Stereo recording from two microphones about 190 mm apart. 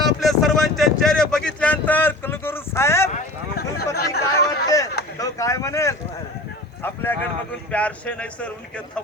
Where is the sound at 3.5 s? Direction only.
55° left (ahead or behind).